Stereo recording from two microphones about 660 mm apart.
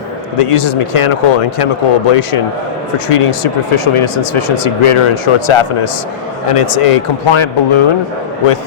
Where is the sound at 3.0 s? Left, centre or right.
Left.